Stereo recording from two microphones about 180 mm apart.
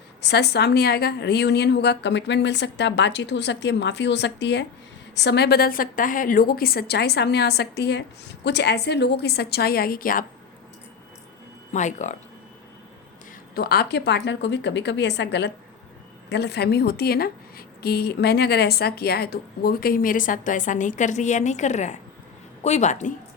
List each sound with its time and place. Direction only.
0.2 s a woman's voice: 65° left (ahead or behind); by 10.2 s 50° left (ahead or behind)
11.7 s a woman's voice: 40° left (ahead or behind)
13.6 s a woman's voice: 60° left (ahead or behind); by 23.1 s 40° left (ahead or behind)